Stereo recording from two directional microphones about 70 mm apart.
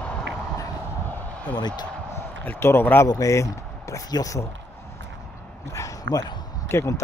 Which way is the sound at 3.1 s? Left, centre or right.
Left.